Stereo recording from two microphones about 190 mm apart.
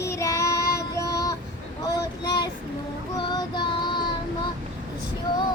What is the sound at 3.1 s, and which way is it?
Music, 25° left (ahead or behind).